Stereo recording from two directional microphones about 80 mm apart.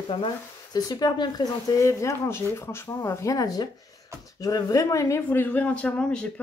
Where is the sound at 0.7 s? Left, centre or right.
Left.